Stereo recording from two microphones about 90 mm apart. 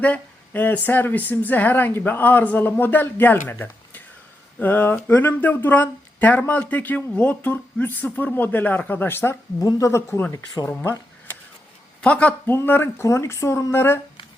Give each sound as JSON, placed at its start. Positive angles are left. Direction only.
{"t": 0.0, "sound": "speech", "side_deg": 20}
{"t": 9.6, "sound": "a woman's voice", "side_deg": 40}
{"t": 10.3, "sound": "speech", "side_deg": 45}
{"t": 12.0, "sound": "a woman's voice", "side_deg": 15}